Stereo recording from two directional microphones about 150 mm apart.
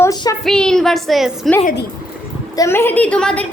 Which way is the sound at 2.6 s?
15° left (ahead or behind).